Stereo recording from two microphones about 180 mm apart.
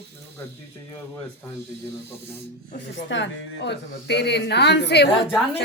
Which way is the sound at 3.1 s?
75° left (ahead or behind).